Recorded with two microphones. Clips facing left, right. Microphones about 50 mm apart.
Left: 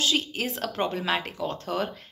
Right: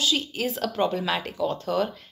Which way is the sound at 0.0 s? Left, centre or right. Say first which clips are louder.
Right 1 dB; left.